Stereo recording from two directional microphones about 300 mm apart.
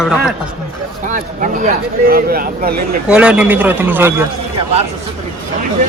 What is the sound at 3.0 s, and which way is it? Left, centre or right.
Speech, centre.